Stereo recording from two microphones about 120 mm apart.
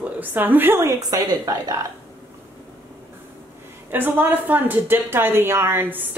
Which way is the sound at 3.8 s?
15° right (ahead or behind).